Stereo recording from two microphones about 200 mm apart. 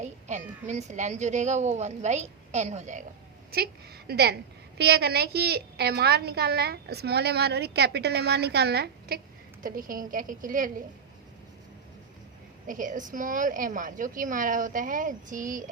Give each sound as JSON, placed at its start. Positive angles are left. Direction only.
{"t": 0.0, "sound": "a woman's voice", "side_deg": -35}
{"t": 3.5, "sound": "a woman's voice", "side_deg": -50}
{"t": 12.6, "sound": "a woman's voice", "side_deg": -40}